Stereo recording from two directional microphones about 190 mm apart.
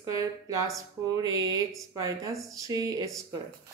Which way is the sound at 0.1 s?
15° right (ahead or behind).